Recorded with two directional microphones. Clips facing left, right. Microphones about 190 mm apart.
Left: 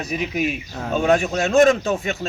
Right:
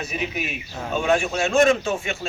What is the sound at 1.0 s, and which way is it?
Speech, 35° left (ahead or behind).